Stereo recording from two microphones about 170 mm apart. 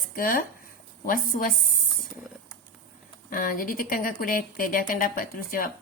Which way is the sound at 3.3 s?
55° left (ahead or behind).